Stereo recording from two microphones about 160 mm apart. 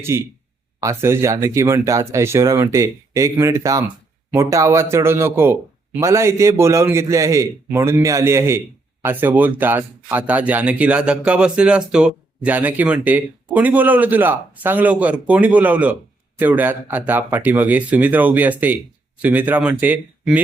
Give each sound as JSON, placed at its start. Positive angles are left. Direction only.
{"t": 0.0, "sound": "speech", "side_deg": -15}